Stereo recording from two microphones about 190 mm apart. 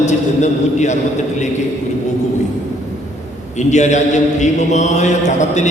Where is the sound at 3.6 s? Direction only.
40° left (ahead or behind).